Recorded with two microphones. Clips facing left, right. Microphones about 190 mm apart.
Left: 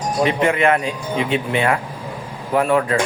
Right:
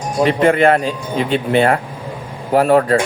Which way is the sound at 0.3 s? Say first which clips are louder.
Right 5 dB; 35° right (ahead or behind).